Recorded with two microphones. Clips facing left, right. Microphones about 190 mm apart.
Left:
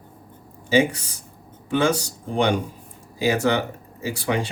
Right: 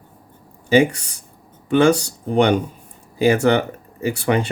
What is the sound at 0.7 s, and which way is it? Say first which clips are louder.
Speech: right 4 dB; 65° right (ahead or behind).